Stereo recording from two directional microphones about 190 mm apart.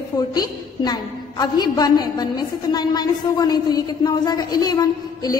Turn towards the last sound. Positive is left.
turn(degrees=20)  # may be behind; listen again after turning